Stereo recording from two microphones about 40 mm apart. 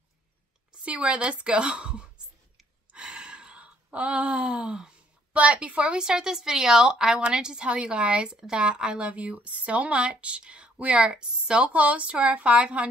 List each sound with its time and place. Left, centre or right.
0.8 s speech: right
2.9 s gasp: right
5.3 s speech: right
5.9 s a woman's voice: centre
11.7 s speech: right